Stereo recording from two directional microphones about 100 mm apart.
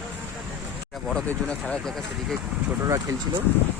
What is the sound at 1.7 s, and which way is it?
Speech, 5° left (ahead or behind).